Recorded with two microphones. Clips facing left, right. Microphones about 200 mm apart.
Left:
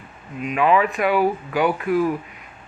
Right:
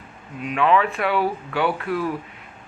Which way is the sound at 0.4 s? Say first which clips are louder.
Left 1 dB; 10° left (ahead or behind).